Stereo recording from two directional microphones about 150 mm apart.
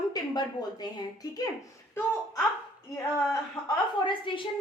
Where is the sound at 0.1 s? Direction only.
25° left (ahead or behind).